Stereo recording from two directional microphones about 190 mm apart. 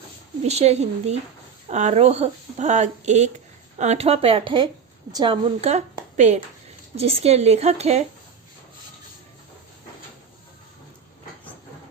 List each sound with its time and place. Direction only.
0.4 s a woman's voice: 35° right (ahead or behind)